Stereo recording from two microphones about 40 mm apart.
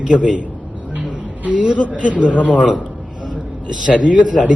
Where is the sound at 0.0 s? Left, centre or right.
Right.